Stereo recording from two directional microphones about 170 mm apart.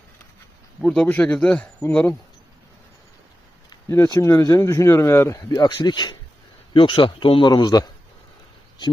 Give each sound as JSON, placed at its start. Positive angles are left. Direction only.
{"t": 0.8, "sound": "speech", "side_deg": 5}
{"t": 3.7, "sound": "speech", "side_deg": 20}